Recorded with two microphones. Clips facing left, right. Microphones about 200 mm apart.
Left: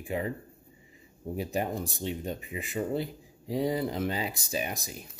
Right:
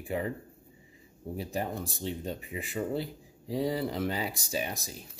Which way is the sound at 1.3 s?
15° left (ahead or behind).